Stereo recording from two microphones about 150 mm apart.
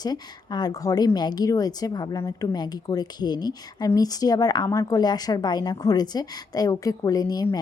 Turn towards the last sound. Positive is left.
turn(degrees=25)  # may be behind; listen again after turning